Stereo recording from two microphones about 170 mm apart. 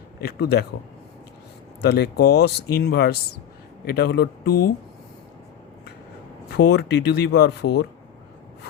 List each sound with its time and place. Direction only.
0.3 s speech: 75° left (ahead or behind)
1.8 s speech: 70° left (ahead or behind)
6.6 s speech: 80° left